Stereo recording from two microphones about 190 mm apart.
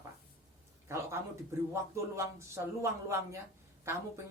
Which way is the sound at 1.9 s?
15° right (ahead or behind).